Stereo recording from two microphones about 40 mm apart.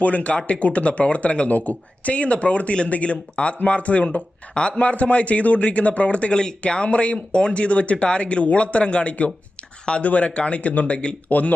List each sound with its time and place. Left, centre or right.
0.0 s speech: left
11.3 s speech: left